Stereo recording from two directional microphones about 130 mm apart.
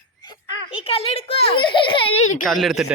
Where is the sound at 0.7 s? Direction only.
45° left (ahead or behind).